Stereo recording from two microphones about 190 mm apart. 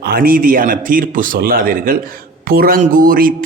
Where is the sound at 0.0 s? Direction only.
55° right (ahead or behind).